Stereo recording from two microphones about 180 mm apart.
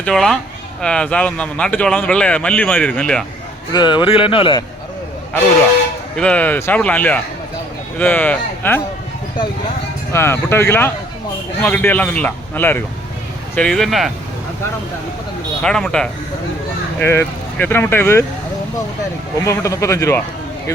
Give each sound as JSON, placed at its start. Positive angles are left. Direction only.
{"t": 0.0, "sound": "speech", "side_deg": 5}
{"t": 3.7, "sound": "speech", "side_deg": 25}
{"t": 6.1, "sound": "speech", "side_deg": 5}
{"t": 10.1, "sound": "speech", "side_deg": 15}
{"t": 15.6, "sound": "speech", "side_deg": 5}
{"t": 19.5, "sound": "speech", "side_deg": 15}